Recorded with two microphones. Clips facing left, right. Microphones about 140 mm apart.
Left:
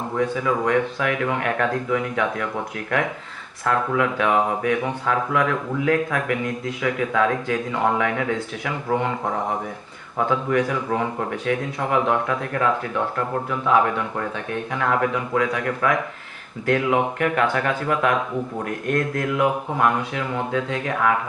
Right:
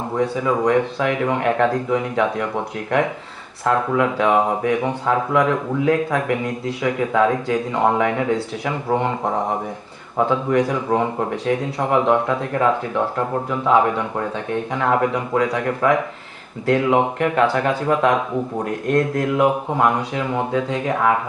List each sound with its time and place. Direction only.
0.2 s a man's voice: 30° right (ahead or behind)
3.6 s a man's voice: 30° right (ahead or behind)
10.2 s a man's voice: 30° right (ahead or behind)